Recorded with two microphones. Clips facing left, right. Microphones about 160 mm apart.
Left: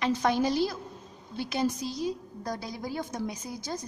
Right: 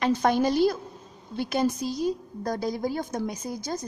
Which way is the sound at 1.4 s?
50° right (ahead or behind).